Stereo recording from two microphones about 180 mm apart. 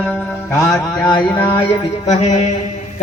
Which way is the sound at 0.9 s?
20° left (ahead or behind).